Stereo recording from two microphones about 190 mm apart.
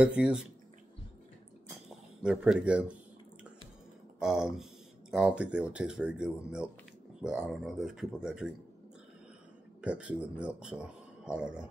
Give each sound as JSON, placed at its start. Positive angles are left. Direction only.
{"t": 0.0, "sound": "speech", "side_deg": -5}
{"t": 1.9, "sound": "speech", "side_deg": -5}
{"t": 4.2, "sound": "speech", "side_deg": -5}
{"t": 9.8, "sound": "speech", "side_deg": -5}